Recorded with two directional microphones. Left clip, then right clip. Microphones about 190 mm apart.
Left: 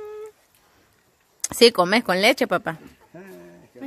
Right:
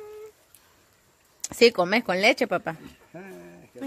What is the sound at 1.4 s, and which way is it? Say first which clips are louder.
A woman's voice: left 3 dB; 15° left (ahead or behind).